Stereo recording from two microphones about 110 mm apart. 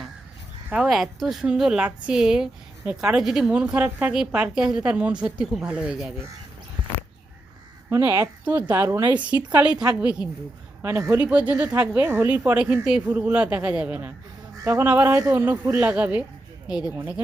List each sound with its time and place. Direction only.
0.7 s a woman's voice: 5° right (ahead or behind)
7.9 s a woman's voice: 25° right (ahead or behind)
10.8 s a woman's voice: 25° right (ahead or behind)
11.2 s speech: 10° right (ahead or behind)
14.6 s a woman's voice: 25° right (ahead or behind); by 16.9 s 10° right (ahead or behind)